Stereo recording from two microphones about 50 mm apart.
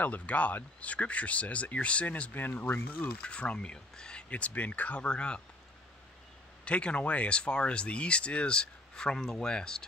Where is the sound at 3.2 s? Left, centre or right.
Left.